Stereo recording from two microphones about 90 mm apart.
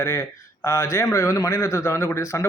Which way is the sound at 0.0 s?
30° left (ahead or behind).